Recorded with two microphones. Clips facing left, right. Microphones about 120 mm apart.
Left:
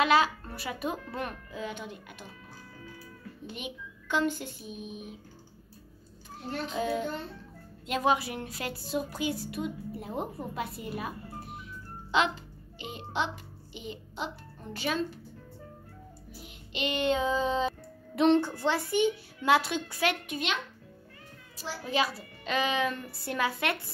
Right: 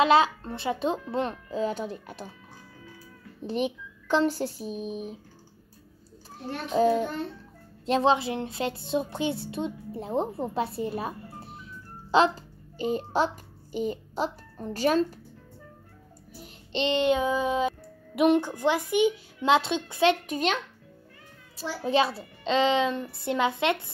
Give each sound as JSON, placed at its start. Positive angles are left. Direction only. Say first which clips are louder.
{"t": 0.0, "sound": "a child's voice", "louder": "right 4 dB", "side_deg": -25}
{"t": 3.4, "sound": "speech", "louder": "right 12 dB", "side_deg": -35}
{"t": 6.7, "sound": "a woman's voice", "louder": "right 9 dB", "side_deg": -30}
{"t": 16.7, "sound": "a child's voice", "louder": "right 5 dB", "side_deg": -25}
{"t": 20.2, "sound": "speech", "louder": "right 6 dB", "side_deg": -40}
{"t": 21.5, "sound": "a child's voice", "louder": "right 5 dB", "side_deg": -30}